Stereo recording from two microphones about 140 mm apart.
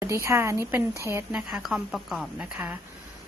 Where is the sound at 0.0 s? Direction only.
20° right (ahead or behind).